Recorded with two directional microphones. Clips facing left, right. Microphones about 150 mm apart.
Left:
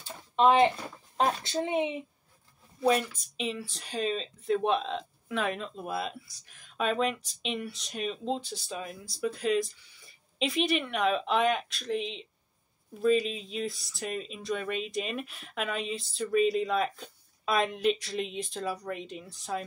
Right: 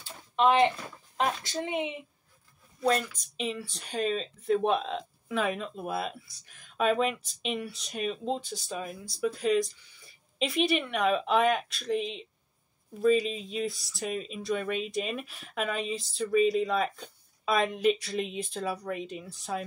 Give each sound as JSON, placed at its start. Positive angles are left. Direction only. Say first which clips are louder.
{"t": 0.0, "sound": "a sound", "louder": "left 1 dB", "side_deg": 25}
{"t": 1.1, "sound": "speech", "louder": "left 2 dB", "side_deg": 30}
{"t": 3.3, "sound": "speech", "louder": "even", "side_deg": 0}